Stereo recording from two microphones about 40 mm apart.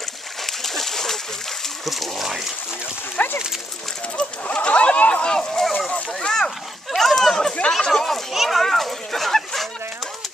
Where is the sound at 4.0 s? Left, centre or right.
Left.